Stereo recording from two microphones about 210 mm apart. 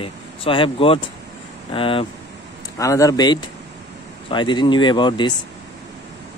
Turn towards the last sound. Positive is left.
turn(degrees=20)  # may be behind; listen again after turning